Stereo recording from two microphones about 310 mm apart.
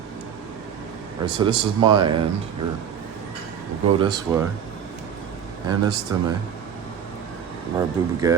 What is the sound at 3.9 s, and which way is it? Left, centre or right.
Speech, centre.